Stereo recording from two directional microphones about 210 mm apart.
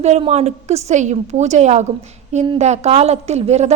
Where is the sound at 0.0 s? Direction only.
30° right (ahead or behind).